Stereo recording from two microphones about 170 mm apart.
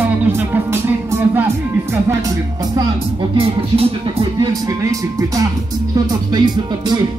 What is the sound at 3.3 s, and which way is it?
Speech, 35° right (ahead or behind).